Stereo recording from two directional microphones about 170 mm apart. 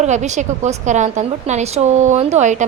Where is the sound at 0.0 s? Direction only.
45° right (ahead or behind).